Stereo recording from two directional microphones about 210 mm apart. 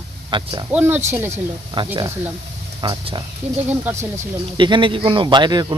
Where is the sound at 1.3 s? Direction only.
20° right (ahead or behind).